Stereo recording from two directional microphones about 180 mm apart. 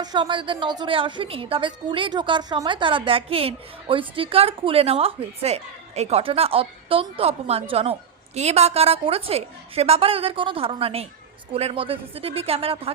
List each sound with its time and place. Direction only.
0.0 s a woman's voice: 25° right (ahead or behind)